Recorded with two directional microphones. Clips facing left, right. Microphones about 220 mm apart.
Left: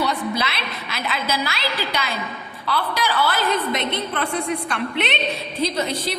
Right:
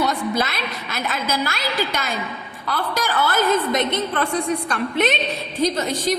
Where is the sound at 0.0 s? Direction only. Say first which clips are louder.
Right 2 dB; 45° right (ahead or behind).